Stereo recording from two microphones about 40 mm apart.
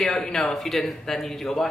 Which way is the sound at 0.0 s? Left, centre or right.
Centre.